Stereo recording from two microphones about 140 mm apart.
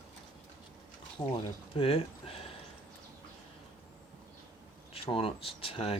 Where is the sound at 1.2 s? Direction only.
40° left (ahead or behind).